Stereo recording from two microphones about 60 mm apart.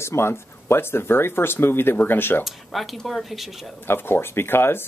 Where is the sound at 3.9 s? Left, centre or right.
Left.